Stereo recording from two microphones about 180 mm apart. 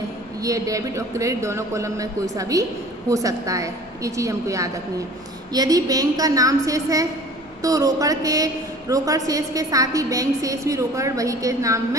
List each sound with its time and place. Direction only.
0.4 s a woman's voice: 20° right (ahead or behind)